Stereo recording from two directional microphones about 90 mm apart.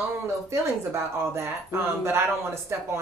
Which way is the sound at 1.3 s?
30° right (ahead or behind).